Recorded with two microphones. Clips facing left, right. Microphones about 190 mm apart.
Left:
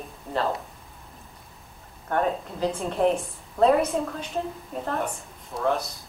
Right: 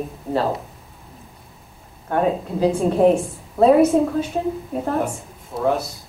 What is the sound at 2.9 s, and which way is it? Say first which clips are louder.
Speech: right 6 dB; 40° right (ahead or behind).